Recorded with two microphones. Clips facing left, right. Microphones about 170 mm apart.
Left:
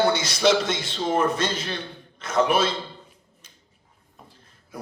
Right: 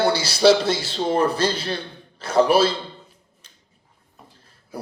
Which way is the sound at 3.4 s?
10° left (ahead or behind).